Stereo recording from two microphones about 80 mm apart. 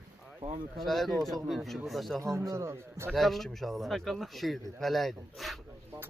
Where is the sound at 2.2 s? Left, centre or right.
Right.